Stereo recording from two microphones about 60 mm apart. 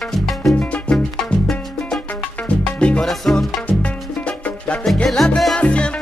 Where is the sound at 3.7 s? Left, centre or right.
Left.